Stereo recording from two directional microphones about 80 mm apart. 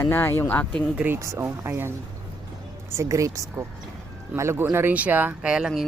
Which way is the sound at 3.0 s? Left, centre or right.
Right.